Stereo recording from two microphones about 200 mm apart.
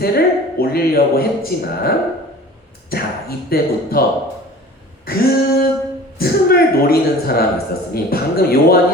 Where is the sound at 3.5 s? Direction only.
50° left (ahead or behind).